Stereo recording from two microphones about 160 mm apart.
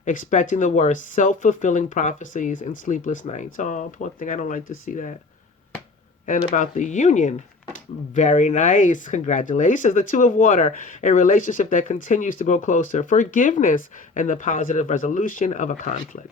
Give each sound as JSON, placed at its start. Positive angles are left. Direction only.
{"t": 0.0, "sound": "speech", "side_deg": 55}
{"t": 6.2, "sound": "speech", "side_deg": 55}